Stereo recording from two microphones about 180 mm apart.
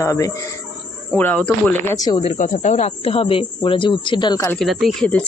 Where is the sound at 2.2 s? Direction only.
40° left (ahead or behind); by 4.4 s 25° left (ahead or behind).